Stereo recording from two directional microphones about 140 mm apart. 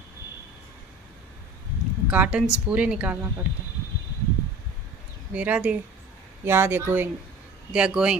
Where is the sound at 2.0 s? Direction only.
10° right (ahead or behind).